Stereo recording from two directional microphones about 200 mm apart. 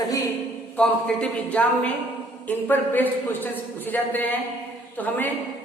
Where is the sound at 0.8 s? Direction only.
5° left (ahead or behind).